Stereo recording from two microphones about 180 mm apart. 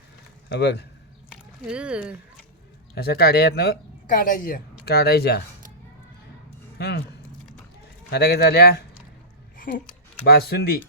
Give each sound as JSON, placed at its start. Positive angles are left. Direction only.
{"t": 0.5, "sound": "speech", "side_deg": 70}
{"t": 1.6, "sound": "speech", "side_deg": -5}
{"t": 2.9, "sound": "speech", "side_deg": 60}
{"t": 6.7, "sound": "speech", "side_deg": 65}
{"t": 8.1, "sound": "speech", "side_deg": 60}
{"t": 9.6, "sound": "a sound", "side_deg": 50}
{"t": 10.2, "sound": "speech", "side_deg": 60}